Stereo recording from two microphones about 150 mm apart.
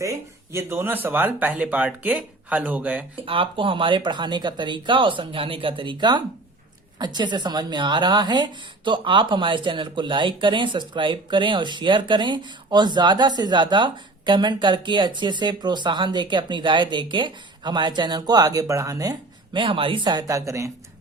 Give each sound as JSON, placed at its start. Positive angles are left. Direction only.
{"t": 0.0, "sound": "speech", "side_deg": -20}
{"t": 3.2, "sound": "a woman's voice", "side_deg": -35}
{"t": 19.5, "sound": "speech", "side_deg": -35}